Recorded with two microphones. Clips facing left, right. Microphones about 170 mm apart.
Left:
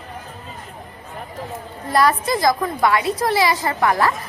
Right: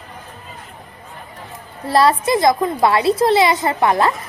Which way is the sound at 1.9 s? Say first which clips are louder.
Right 3 dB; 30° right (ahead or behind).